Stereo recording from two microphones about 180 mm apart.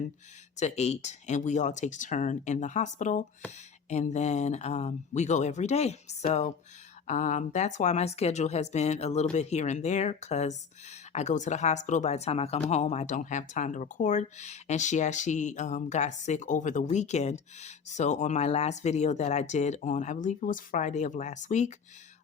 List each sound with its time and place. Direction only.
0.6 s speech: 40° left (ahead or behind)